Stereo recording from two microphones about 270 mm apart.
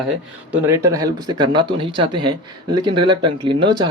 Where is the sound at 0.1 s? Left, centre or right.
Centre.